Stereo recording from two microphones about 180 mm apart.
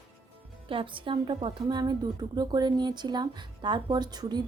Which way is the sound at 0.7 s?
30° right (ahead or behind).